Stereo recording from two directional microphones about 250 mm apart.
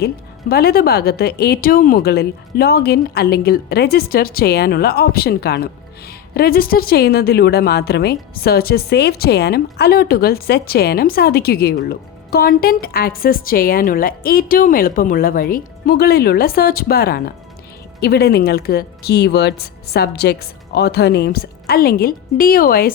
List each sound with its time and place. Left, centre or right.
0.0 s a woman's voice: left